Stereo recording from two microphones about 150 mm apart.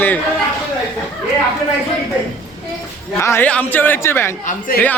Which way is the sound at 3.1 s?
15° left (ahead or behind).